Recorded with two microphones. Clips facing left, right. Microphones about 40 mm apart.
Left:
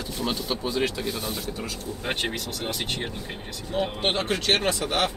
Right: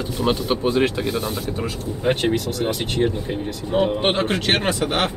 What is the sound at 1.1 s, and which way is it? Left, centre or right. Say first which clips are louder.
Speech: right 7 dB; centre.